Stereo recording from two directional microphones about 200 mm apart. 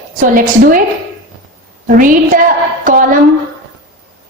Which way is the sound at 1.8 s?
40° right (ahead or behind).